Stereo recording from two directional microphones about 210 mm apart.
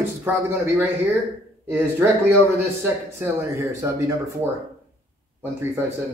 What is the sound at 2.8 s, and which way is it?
Speech, 10° right (ahead or behind).